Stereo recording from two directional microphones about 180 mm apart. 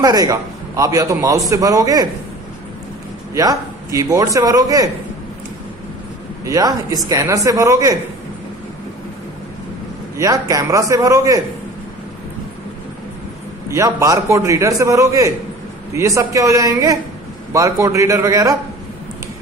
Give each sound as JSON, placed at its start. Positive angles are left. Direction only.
{"t": 0.0, "sound": "a man's voice", "side_deg": -20}
{"t": 3.3, "sound": "a man's voice", "side_deg": -20}
{"t": 6.4, "sound": "a man's voice", "side_deg": -20}
{"t": 10.1, "sound": "a man's voice", "side_deg": -20}
{"t": 13.7, "sound": "a man's voice", "side_deg": -15}